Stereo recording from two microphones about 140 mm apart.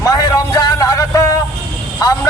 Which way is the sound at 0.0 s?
25° left (ahead or behind).